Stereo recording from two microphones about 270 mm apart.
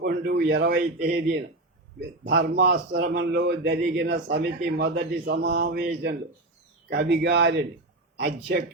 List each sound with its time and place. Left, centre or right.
0.0 s a man's voice: right